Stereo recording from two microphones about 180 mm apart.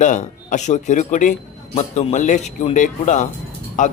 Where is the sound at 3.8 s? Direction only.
45° left (ahead or behind).